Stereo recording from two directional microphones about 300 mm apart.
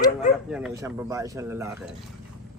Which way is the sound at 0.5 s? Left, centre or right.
Centre.